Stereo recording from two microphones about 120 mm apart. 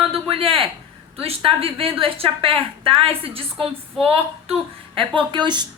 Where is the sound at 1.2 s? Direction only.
50° right (ahead or behind).